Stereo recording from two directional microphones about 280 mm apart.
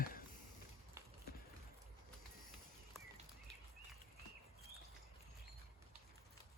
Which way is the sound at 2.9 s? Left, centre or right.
Centre.